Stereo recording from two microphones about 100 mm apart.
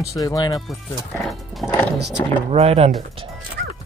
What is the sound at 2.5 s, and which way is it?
Speech, 90° right.